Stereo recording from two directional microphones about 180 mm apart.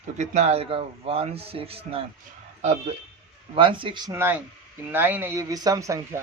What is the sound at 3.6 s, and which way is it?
A man's voice, 30° right (ahead or behind).